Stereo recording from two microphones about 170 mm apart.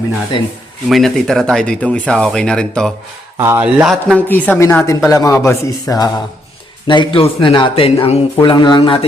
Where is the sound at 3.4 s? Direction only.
15° right (ahead or behind); by 9.0 s 30° left (ahead or behind).